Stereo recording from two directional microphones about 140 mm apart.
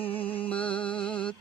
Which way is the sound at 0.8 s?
10° left (ahead or behind).